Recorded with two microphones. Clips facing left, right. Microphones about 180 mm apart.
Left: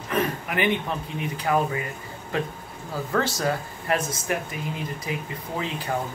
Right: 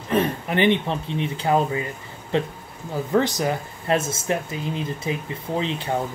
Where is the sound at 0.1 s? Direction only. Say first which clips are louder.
Right 4 dB; 30° right (ahead or behind).